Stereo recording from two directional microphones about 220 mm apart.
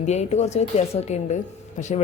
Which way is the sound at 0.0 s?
30° left (ahead or behind).